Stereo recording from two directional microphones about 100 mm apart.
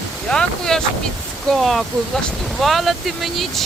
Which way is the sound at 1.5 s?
Centre (ahead or behind).